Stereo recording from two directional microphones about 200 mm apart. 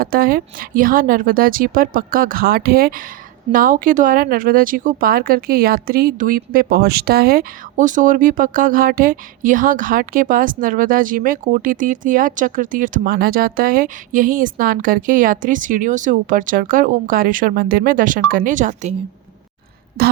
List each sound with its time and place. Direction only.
0.0 s speech: 45° right (ahead or behind)